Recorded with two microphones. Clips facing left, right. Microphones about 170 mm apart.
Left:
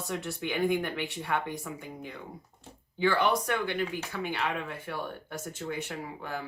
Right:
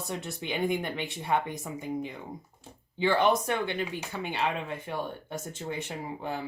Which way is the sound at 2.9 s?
20° right (ahead or behind).